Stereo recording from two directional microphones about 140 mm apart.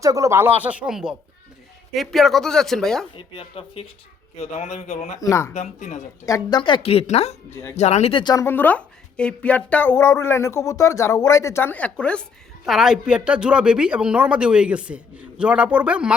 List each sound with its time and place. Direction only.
0.0 s speech: 25° right (ahead or behind); by 3.1 s 5° left (ahead or behind)
3.2 s a woman's voice: 40° left (ahead or behind)
4.4 s a man's voice: 55° left (ahead or behind)
5.2 s speech: 20° left (ahead or behind)
5.5 s a man's voice: 55° left (ahead or behind)
6.2 s speech: 25° left (ahead or behind)
6.6 s a woman's voice: 35° left (ahead or behind)
7.5 s speech: 15° left (ahead or behind)
7.8 s a woman's voice: 50° left (ahead or behind)
8.2 s speech: 30° left (ahead or behind)
8.4 s speech: 15° left (ahead or behind); by 16.1 s 10° right (ahead or behind)